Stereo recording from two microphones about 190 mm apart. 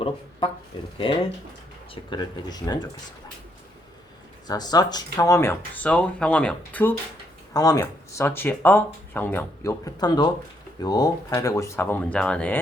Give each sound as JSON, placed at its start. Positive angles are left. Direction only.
{"t": 0.0, "sound": "speech", "side_deg": 30}
{"t": 2.0, "sound": "speech", "side_deg": 20}
{"t": 4.4, "sound": "speech", "side_deg": 20}
{"t": 7.5, "sound": "speech", "side_deg": 20}